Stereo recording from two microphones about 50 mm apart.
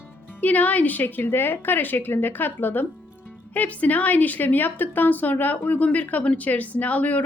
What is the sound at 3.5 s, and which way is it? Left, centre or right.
A woman's voice, left.